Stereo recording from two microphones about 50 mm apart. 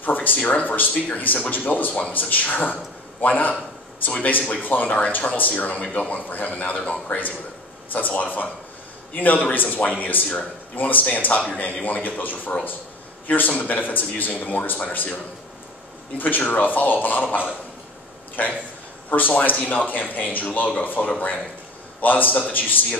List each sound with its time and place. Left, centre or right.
0.0 s speech: left
16.2 s speech: left